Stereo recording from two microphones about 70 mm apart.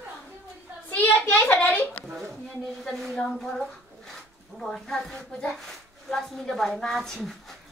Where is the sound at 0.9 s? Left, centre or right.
Left.